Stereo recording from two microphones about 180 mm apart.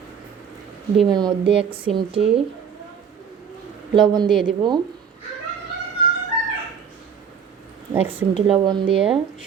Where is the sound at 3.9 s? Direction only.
25° right (ahead or behind).